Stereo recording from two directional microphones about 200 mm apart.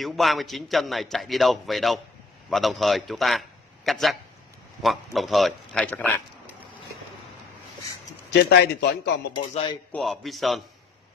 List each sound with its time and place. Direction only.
0.0 s a man's voice: centre (ahead or behind)
8.3 s a man's voice: 55° left (ahead or behind)
9.9 s a man's voice: centre (ahead or behind)